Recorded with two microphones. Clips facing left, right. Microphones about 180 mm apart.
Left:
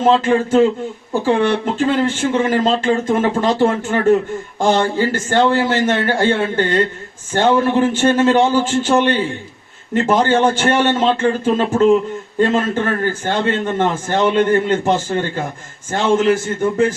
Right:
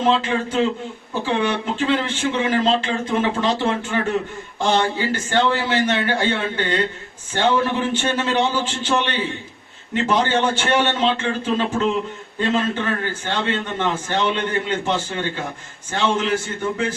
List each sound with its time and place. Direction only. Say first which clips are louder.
0.2 s a man's voice: left 8 dB; 45° left (ahead or behind)